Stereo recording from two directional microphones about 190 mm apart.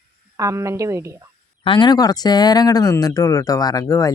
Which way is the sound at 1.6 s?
25° left (ahead or behind).